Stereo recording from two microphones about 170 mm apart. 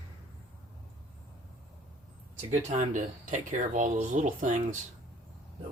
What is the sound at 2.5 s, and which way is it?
Speech, 45° right (ahead or behind).